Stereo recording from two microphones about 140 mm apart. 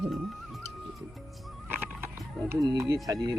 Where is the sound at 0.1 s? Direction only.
Centre (ahead or behind).